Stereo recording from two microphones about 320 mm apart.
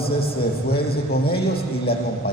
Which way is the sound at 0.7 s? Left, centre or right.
Left.